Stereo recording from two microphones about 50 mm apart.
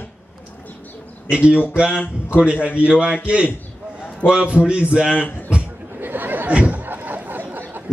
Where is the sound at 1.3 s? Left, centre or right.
Right.